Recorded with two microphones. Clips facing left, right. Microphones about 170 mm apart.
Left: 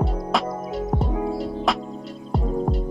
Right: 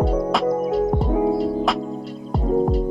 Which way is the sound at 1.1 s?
25° right (ahead or behind).